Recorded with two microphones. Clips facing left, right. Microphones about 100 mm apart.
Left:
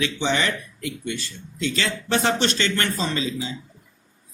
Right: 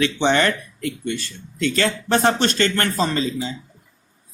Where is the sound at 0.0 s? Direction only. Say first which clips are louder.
Right 5 dB; 60° right (ahead or behind); by 3.5 s 45° right (ahead or behind).